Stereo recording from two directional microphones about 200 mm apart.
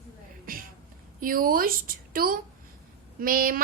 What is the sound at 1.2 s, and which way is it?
A woman's voice, 45° right (ahead or behind).